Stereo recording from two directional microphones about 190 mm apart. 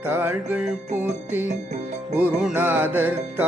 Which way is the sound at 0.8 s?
40° right (ahead or behind).